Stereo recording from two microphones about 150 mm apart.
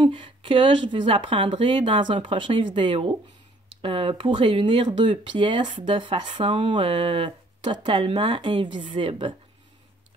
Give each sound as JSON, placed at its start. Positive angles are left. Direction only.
{"t": 0.0, "sound": "speech", "side_deg": -35}